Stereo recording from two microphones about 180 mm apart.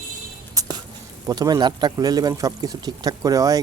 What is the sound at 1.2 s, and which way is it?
Speech, 20° right (ahead or behind).